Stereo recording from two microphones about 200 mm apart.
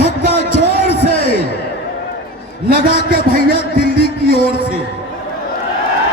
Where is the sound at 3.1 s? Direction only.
45° right (ahead or behind).